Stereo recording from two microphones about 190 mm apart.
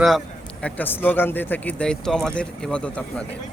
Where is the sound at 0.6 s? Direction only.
10° left (ahead or behind).